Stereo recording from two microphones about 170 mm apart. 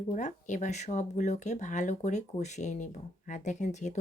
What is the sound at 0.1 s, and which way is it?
Speech, 45° left (ahead or behind).